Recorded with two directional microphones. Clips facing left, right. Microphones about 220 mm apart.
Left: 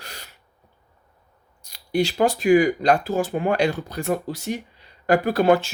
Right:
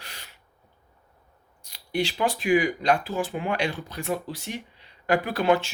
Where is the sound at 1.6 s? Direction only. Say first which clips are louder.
Left 5 dB; 40° left (ahead or behind).